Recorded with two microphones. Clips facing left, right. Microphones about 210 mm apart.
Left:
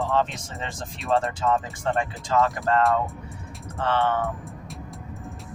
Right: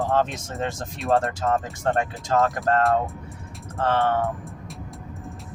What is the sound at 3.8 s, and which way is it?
Speech, 50° right (ahead or behind).